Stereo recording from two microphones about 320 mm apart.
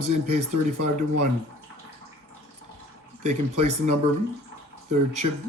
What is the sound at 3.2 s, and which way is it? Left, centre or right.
Speech, right.